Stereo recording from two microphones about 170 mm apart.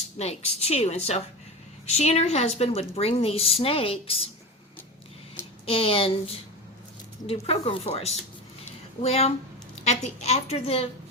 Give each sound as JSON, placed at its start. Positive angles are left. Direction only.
{"t": 0.2, "sound": "a woman's voice", "side_deg": 40}
{"t": 5.6, "sound": "a woman's voice", "side_deg": 35}
{"t": 7.4, "sound": "a woman's voice", "side_deg": 35}